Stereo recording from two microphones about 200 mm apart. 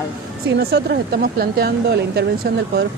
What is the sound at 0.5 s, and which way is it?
Speech, 50° right (ahead or behind).